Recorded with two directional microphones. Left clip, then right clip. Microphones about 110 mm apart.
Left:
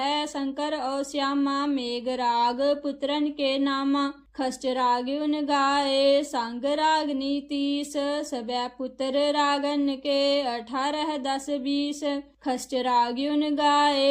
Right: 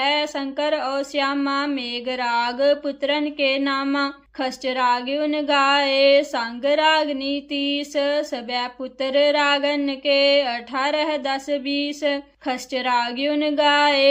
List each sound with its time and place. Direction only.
0.0 s speech: 40° left (ahead or behind)